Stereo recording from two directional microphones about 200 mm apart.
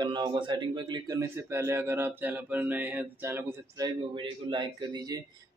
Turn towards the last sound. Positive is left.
turn(degrees=-20)  # may be behind; listen again after turning